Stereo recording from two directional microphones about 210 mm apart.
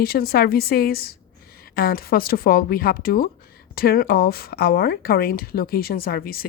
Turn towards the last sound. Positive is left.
turn(degrees=45)  # may be behind; listen again after turning